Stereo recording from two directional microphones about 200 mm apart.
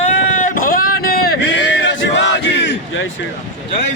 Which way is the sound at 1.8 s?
65° left (ahead or behind).